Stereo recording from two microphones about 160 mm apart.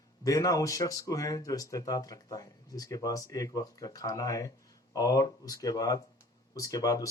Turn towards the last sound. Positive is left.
turn(degrees=20)  # may be behind; listen again after turning